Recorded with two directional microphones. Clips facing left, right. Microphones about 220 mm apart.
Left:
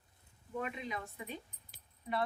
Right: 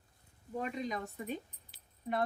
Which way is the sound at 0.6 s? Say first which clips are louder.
Right 4 dB; 40° right (ahead or behind).